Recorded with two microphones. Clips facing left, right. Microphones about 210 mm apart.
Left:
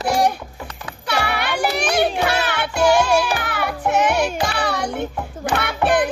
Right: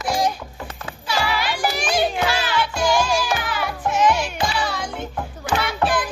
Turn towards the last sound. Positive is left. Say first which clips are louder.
# left 3 dB
turn(degrees=60)  # may be behind; listen again after turning